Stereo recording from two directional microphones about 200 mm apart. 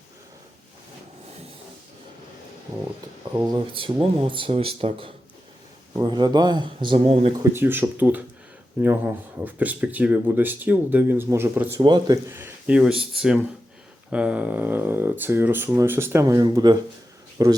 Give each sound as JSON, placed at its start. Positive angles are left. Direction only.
{"t": 3.5, "sound": "speech", "side_deg": -25}
{"t": 7.3, "sound": "speech", "side_deg": -10}
{"t": 11.8, "sound": "speech", "side_deg": -20}